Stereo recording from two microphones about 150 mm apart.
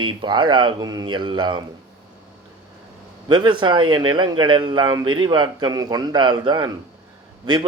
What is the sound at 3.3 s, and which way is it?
Speech, 30° right (ahead or behind).